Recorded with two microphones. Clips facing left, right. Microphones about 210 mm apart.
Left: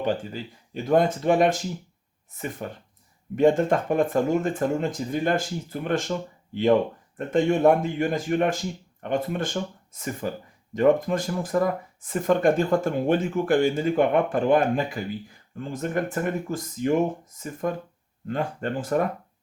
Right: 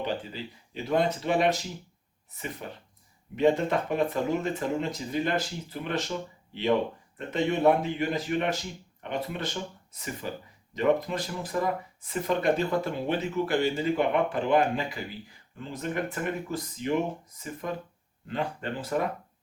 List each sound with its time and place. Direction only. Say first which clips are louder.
0.0 s speech: left 5 dB; 45° left (ahead or behind)
2.6 s speech: left 6 dB; 50° left (ahead or behind)